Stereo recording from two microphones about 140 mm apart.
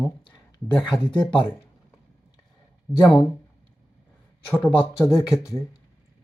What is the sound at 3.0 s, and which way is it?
Speech, centre (ahead or behind).